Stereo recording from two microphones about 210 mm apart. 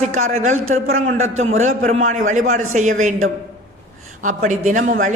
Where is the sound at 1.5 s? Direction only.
70° right (ahead or behind).